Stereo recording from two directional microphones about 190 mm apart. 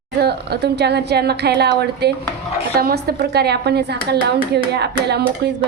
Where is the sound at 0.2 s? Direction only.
60° right (ahead or behind).